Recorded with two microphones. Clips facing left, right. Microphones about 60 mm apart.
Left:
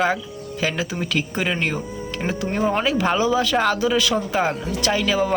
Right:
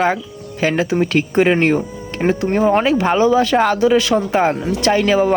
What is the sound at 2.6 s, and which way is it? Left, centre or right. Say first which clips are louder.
Speech: right 6 dB; centre.